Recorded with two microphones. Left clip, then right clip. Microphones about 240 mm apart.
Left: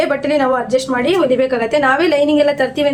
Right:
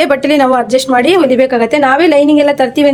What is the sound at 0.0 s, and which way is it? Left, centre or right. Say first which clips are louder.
Speech: right 5 dB; right.